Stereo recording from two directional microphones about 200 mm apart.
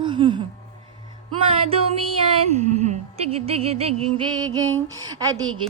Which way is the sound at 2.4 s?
35° right (ahead or behind).